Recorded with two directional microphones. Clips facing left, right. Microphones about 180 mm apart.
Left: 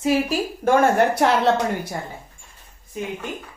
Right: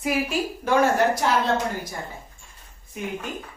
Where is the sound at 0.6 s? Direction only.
55° left (ahead or behind); by 1.6 s 70° left (ahead or behind).